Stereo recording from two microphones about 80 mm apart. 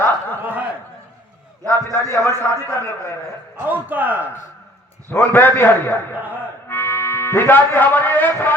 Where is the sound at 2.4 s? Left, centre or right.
Left.